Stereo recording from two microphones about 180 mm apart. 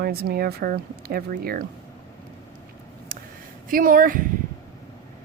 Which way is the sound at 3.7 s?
50° right (ahead or behind).